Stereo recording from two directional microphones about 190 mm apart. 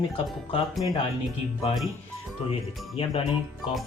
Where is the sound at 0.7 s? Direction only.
Centre (ahead or behind).